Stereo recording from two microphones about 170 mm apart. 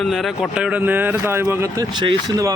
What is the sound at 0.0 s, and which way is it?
Speech, centre (ahead or behind).